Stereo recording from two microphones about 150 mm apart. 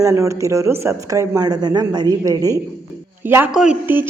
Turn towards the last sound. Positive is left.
turn(degrees=-10)  # may be behind; listen again after turning